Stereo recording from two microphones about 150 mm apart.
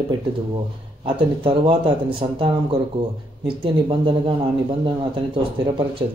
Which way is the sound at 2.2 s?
45° right (ahead or behind).